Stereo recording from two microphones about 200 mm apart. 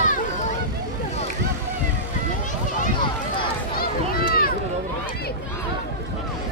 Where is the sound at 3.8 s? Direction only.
45° left (ahead or behind).